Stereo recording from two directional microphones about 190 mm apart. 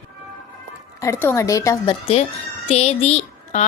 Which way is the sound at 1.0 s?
15° left (ahead or behind).